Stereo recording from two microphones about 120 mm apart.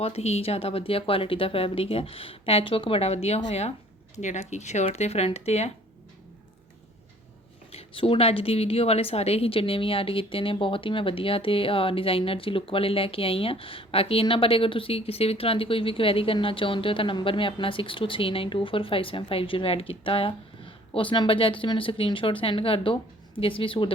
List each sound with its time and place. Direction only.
0.0 s a woman's voice: 60° left (ahead or behind)
4.1 s speech: 75° left (ahead or behind)
7.7 s a woman's voice: 55° left (ahead or behind)